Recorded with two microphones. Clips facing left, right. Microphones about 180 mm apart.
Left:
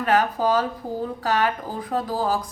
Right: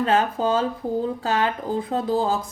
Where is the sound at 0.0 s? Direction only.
25° right (ahead or behind).